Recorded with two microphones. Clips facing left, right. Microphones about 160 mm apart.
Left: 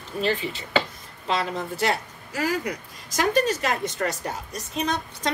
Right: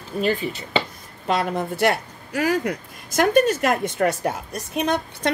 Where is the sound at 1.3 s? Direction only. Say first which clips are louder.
Right 4 dB; 55° right (ahead or behind).